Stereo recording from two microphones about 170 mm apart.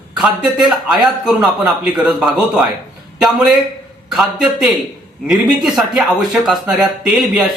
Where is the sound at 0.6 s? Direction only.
5° right (ahead or behind).